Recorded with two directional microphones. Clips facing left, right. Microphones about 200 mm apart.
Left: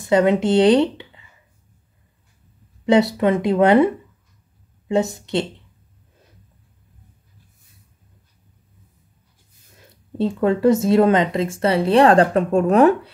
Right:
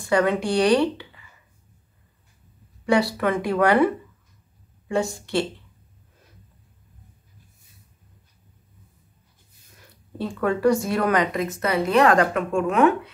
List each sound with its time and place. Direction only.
0.0 s speech: 20° left (ahead or behind)
2.8 s speech: 20° left (ahead or behind)
9.8 s speech: 25° left (ahead or behind)